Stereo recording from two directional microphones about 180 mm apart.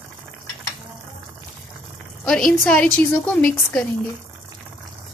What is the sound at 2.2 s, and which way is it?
A woman's voice, 5° left (ahead or behind).